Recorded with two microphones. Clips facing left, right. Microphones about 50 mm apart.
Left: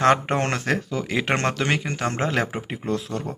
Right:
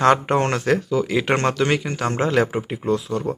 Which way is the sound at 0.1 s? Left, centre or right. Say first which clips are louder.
Right 3 dB; left.